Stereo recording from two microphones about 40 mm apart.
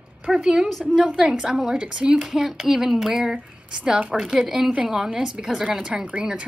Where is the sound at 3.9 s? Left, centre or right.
Right.